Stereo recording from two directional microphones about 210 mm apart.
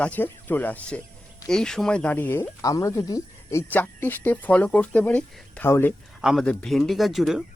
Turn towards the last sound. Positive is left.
turn(degrees=0)  # may be behind; listen again after turning